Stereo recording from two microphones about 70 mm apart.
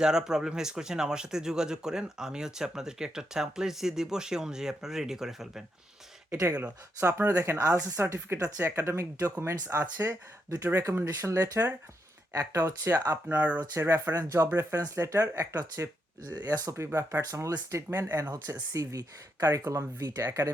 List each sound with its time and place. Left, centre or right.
0.0 s speech: centre
6.3 s speech: right
7.0 s speech: right
13.2 s speech: right
13.7 s speech: right
16.7 s speech: right